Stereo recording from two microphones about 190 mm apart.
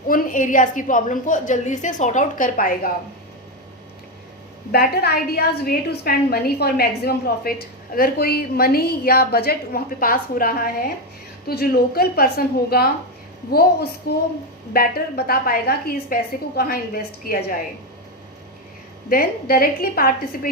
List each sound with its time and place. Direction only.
0.1 s a woman's voice: 45° left (ahead or behind)
4.7 s a woman's voice: 55° left (ahead or behind)
14.0 s a woman's voice: 55° left (ahead or behind)
19.0 s a woman's voice: 50° left (ahead or behind)